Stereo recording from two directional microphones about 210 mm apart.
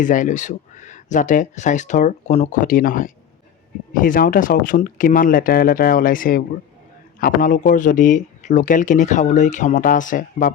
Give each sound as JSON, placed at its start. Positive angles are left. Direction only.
{"t": 0.0, "sound": "speech", "side_deg": 40}